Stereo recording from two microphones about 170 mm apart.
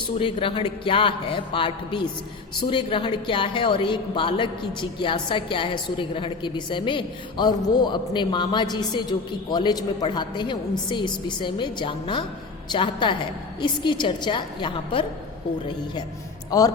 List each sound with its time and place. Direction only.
0.2 s a woman's voice: 30° left (ahead or behind)
16.5 s a woman's voice: 20° left (ahead or behind)